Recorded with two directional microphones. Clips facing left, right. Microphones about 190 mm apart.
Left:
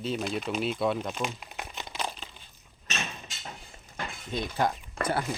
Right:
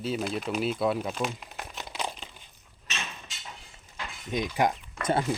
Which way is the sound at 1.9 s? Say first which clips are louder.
Right 1 dB; 15° right (ahead or behind).